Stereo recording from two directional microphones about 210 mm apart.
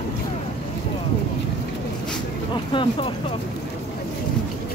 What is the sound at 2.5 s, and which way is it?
Vehicle, 25° left (ahead or behind).